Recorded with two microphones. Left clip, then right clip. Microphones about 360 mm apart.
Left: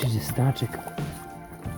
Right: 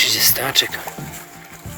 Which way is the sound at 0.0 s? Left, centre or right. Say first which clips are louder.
Right 13 dB; centre.